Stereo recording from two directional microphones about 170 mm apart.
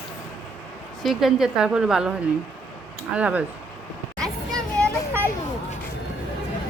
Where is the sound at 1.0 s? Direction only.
Centre (ahead or behind).